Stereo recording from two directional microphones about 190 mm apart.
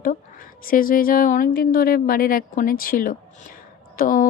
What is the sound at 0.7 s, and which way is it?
Speech, 45° left (ahead or behind).